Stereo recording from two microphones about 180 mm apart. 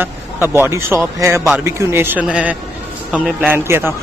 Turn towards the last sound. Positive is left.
turn(degrees=-10)  # may be behind; listen again after turning